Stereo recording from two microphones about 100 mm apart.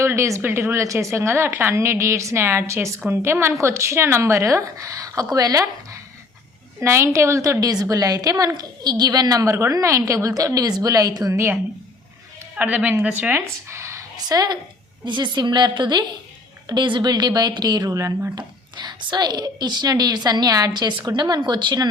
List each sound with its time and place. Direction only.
0.0 s a woman's voice: 30° right (ahead or behind)
12.5 s a woman's voice: 15° right (ahead or behind)
13.3 s a sound: 25° right (ahead or behind)
14.2 s a woman's voice: 40° right (ahead or behind)